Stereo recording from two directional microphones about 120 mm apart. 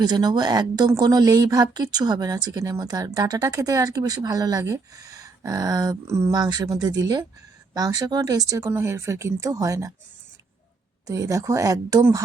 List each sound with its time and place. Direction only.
0.0 s a woman's voice: 35° right (ahead or behind)
11.0 s speech: 30° right (ahead or behind)